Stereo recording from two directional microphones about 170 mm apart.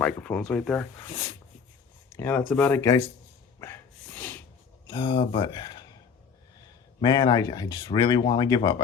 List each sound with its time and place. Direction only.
0.0 s speech: 5° left (ahead or behind)
2.1 s speech: 10° left (ahead or behind)
3.6 s snort: 15° left (ahead or behind)
4.9 s speech: 25° left (ahead or behind)